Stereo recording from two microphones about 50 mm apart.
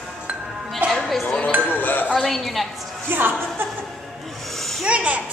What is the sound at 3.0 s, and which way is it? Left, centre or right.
Speech, right.